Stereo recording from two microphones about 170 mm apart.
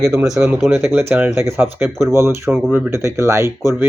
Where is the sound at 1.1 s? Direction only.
15° right (ahead or behind).